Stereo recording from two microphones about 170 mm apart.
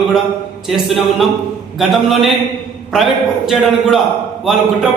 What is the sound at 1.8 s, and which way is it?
A man's voice, centre (ahead or behind).